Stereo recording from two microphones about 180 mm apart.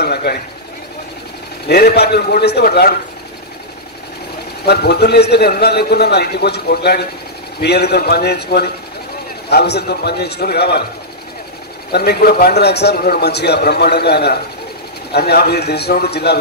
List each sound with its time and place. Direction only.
0.0 s a man's voice: 65° left (ahead or behind)
1.7 s a man's voice: 60° left (ahead or behind)
4.6 s a man's voice: 65° left (ahead or behind)
11.9 s a man's voice: 60° left (ahead or behind)